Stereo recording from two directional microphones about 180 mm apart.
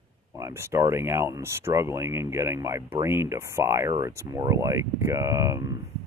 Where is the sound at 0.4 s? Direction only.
15° right (ahead or behind).